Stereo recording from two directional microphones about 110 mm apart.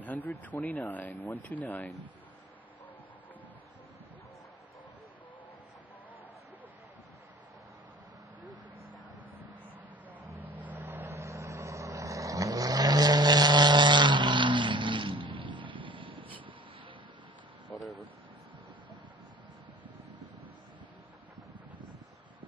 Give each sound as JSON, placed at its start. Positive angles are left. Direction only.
{"t": 0.0, "sound": "speech", "side_deg": 15}
{"t": 10.4, "sound": "vehicle", "side_deg": -15}